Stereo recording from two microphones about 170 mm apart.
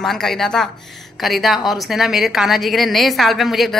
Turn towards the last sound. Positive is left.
turn(degrees=0)  # may be behind; listen again after turning